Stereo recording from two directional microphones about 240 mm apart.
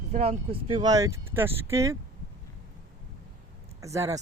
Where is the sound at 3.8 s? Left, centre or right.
Centre.